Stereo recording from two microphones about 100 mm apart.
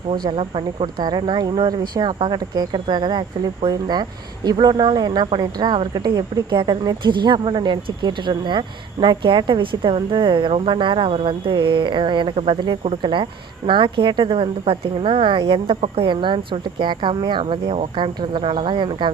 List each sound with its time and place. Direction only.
0.1 s speech: 60° right (ahead or behind)
0.9 s speech: 45° right (ahead or behind)